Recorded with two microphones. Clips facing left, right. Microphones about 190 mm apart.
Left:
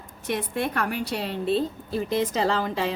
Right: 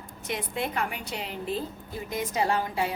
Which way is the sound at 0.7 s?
70° left (ahead or behind).